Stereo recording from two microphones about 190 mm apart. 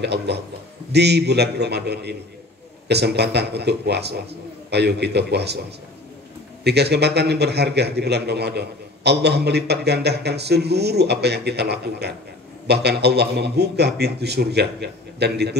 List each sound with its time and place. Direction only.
0.0 s a man's voice: 60° right (ahead or behind)
6.6 s a man's voice: 60° right (ahead or behind)